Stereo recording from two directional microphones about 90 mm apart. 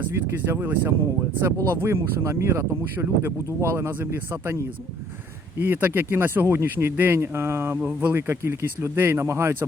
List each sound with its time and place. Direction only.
0.0 s speech: 25° right (ahead or behind)
5.6 s speech: 25° right (ahead or behind)